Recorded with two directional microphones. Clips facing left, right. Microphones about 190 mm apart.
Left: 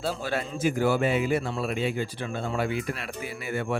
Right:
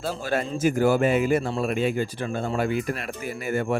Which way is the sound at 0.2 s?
45° right (ahead or behind).